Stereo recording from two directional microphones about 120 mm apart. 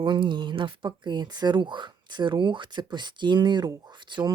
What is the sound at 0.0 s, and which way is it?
Speech, 45° right (ahead or behind).